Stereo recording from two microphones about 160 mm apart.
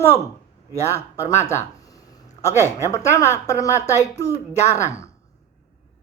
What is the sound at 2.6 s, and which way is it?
A woman's voice, 20° left (ahead or behind).